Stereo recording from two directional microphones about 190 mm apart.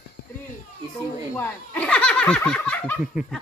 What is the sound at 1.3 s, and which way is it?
Speech, 10° left (ahead or behind).